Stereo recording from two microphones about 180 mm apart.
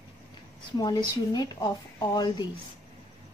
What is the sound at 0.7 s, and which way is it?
A woman's voice, 20° left (ahead or behind).